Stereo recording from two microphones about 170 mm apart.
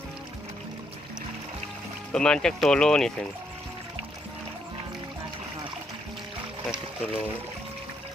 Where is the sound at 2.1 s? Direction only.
5° left (ahead or behind).